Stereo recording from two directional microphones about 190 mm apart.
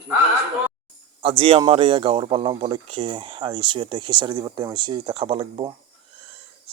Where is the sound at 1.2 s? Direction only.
30° right (ahead or behind).